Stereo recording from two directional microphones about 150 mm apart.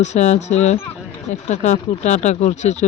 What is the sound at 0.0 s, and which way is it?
Speech, 50° left (ahead or behind).